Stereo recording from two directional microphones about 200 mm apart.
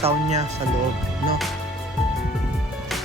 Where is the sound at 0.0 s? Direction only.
35° right (ahead or behind).